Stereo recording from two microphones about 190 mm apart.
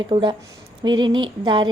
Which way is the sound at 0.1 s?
25° right (ahead or behind).